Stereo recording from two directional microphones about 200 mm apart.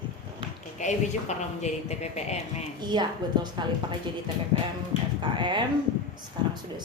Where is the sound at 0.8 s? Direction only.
35° left (ahead or behind).